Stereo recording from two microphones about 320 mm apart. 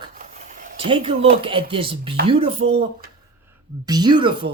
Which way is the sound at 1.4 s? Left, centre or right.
Centre.